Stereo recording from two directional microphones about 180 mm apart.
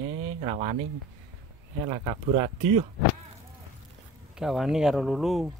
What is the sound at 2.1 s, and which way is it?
Speech, 30° right (ahead or behind).